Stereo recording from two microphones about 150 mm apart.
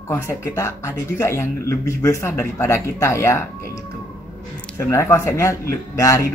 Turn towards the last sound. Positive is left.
turn(degrees=20)  # may be behind; listen again after turning